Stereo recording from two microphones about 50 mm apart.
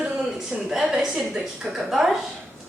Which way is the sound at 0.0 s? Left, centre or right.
Centre.